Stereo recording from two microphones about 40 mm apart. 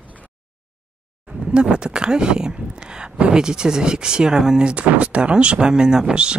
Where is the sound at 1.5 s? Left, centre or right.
Right.